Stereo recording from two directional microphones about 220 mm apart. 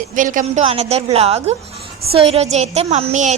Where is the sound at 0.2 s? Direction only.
35° right (ahead or behind).